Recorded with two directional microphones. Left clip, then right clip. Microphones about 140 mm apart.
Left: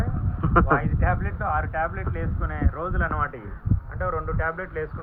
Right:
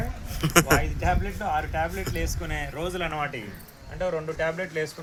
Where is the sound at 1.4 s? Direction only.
10° right (ahead or behind).